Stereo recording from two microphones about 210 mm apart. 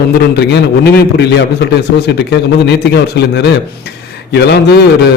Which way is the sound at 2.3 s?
55° left (ahead or behind).